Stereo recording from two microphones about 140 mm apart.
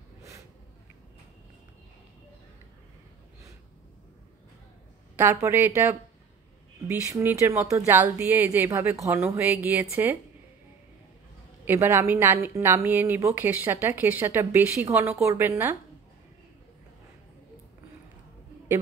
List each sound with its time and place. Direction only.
5.1 s speech: 15° right (ahead or behind)
11.6 s speech: 15° right (ahead or behind)